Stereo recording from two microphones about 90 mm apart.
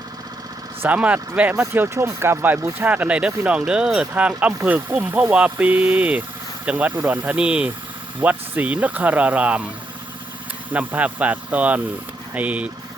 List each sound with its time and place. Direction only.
0.9 s speech: 15° right (ahead or behind)
1.6 s speech: 25° right (ahead or behind)
10.7 s speech: 15° right (ahead or behind)